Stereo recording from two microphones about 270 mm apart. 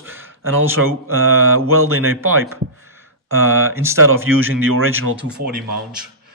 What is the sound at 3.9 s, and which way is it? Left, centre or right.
Mantra, right.